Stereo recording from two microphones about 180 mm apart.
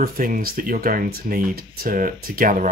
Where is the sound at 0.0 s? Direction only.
50° right (ahead or behind).